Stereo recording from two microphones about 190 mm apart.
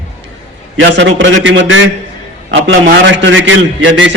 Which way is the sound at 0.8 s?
70° right (ahead or behind).